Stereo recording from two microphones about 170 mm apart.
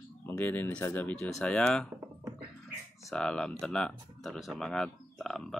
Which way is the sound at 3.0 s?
5° left (ahead or behind).